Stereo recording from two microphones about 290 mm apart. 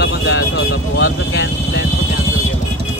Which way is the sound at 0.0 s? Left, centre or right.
Left.